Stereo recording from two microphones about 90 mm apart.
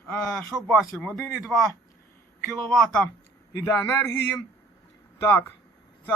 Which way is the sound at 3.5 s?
30° left (ahead or behind).